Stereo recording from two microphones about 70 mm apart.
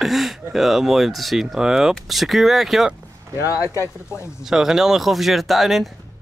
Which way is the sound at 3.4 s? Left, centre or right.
Left.